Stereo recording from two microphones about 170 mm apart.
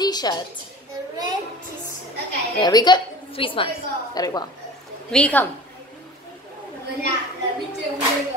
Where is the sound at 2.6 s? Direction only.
25° left (ahead or behind).